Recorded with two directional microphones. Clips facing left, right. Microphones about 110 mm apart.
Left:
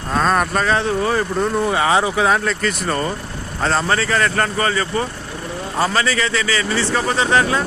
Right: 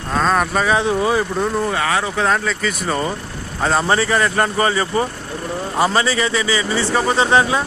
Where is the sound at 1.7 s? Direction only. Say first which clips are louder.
Left 3 dB; 20° left (ahead or behind).